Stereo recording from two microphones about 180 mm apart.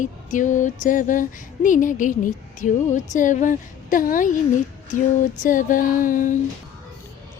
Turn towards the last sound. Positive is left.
turn(degrees=50)  # may be behind; listen again after turning